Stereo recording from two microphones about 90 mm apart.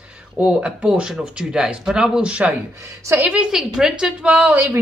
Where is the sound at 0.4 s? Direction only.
10° right (ahead or behind).